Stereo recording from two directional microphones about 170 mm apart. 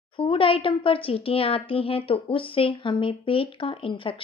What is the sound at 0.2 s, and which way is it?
Speech, 30° left (ahead or behind).